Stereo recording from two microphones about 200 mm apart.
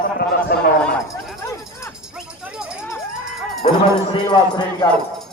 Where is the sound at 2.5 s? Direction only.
5° right (ahead or behind).